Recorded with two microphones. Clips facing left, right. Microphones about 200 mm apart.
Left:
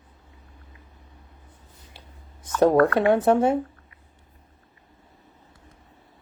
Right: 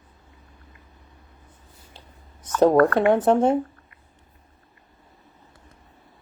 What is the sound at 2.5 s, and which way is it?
Speech, 25° right (ahead or behind).